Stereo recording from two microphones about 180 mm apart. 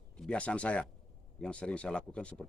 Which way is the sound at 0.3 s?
5° left (ahead or behind).